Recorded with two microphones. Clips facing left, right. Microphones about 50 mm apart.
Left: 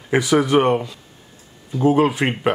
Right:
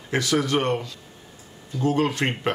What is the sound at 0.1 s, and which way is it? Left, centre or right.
Speech, centre.